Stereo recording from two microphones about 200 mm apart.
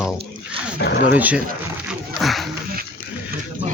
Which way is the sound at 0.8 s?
60° left (ahead or behind).